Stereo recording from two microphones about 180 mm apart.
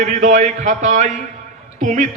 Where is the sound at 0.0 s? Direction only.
45° right (ahead or behind).